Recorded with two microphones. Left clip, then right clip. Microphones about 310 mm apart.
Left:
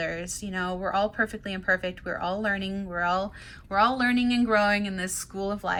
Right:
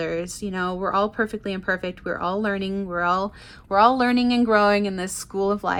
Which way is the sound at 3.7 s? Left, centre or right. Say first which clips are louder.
Right 6 dB; centre.